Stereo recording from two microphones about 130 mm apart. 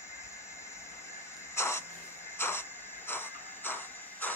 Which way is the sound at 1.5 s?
20° left (ahead or behind).